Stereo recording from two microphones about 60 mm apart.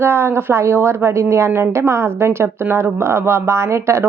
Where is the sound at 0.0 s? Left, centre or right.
Right.